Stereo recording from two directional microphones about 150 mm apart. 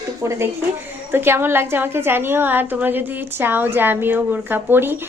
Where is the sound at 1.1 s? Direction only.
15° right (ahead or behind).